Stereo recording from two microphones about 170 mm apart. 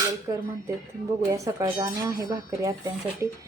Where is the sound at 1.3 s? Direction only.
20° right (ahead or behind).